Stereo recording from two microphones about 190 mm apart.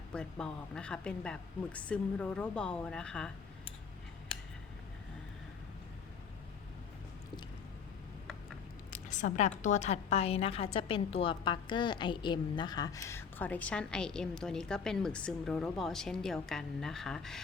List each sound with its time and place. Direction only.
0.1 s a woman's voice: 5° left (ahead or behind)
8.9 s a sound: 40° left (ahead or behind)
9.6 s a woman's voice: 40° left (ahead or behind); by 17.4 s centre (ahead or behind)